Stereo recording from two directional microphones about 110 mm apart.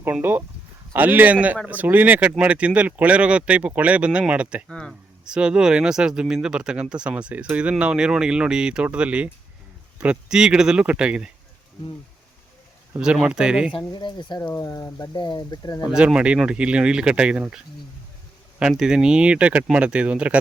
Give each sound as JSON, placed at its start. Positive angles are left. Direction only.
{"t": 0.0, "sound": "speech", "side_deg": -20}
{"t": 13.0, "sound": "speech", "side_deg": -5}
{"t": 13.9, "sound": "speech", "side_deg": 45}
{"t": 15.1, "sound": "speech", "side_deg": 45}
{"t": 15.9, "sound": "speech", "side_deg": -10}
{"t": 18.6, "sound": "speech", "side_deg": -5}